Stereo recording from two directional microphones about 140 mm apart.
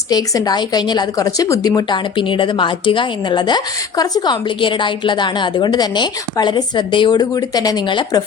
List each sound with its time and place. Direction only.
0.1 s a woman's voice: 30° left (ahead or behind)